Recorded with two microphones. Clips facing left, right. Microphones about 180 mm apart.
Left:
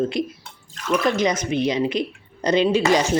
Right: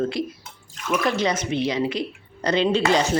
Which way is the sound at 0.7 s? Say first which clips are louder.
Left 3 dB; 5° right (ahead or behind).